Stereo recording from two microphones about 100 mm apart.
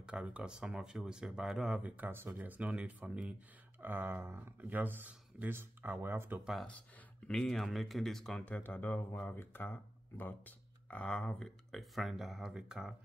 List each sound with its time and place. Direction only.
0.0 s speech: 10° right (ahead or behind)
6.4 s speech: centre (ahead or behind)